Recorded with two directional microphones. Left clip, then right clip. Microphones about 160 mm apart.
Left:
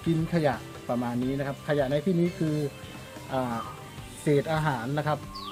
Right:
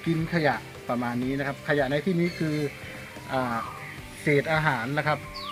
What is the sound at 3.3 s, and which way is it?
Speech, 5° left (ahead or behind).